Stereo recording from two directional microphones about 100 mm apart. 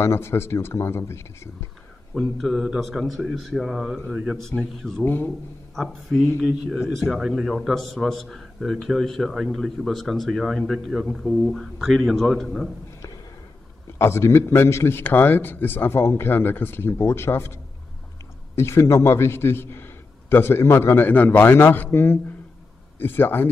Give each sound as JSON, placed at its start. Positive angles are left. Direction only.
{"t": 0.0, "sound": "a man's voice", "side_deg": 25}
{"t": 2.1, "sound": "a man's voice", "side_deg": 0}
{"t": 4.4, "sound": "a man's voice", "side_deg": 5}
{"t": 5.0, "sound": "a man's voice", "side_deg": 20}
{"t": 6.3, "sound": "a man's voice", "side_deg": -10}
{"t": 13.9, "sound": "a man's voice", "side_deg": 25}
{"t": 18.6, "sound": "a man's voice", "side_deg": 25}